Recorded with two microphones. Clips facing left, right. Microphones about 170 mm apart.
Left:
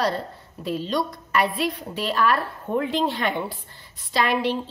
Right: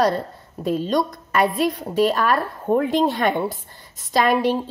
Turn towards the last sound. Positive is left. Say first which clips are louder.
# right 4 dB
turn(degrees=-45)  # may be behind; listen again after turning